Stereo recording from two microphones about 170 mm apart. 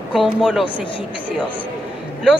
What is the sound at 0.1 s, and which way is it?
Speech, centre (ahead or behind).